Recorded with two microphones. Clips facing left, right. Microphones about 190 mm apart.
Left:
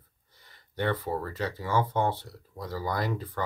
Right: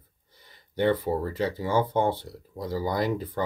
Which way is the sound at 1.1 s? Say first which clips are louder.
Right 5 dB; 25° right (ahead or behind).